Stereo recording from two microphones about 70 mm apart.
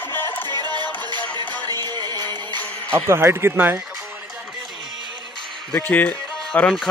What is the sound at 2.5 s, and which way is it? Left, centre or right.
Music, left.